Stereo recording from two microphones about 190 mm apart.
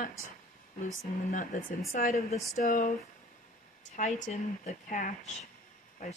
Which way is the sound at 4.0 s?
40° left (ahead or behind).